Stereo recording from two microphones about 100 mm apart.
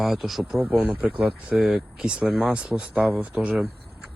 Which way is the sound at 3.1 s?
25° right (ahead or behind).